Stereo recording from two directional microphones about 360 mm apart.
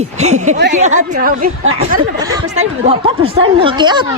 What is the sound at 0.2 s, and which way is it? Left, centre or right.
A woman's voice, centre.